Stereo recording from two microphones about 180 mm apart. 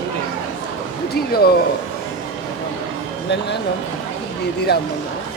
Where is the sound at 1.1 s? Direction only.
60° left (ahead or behind).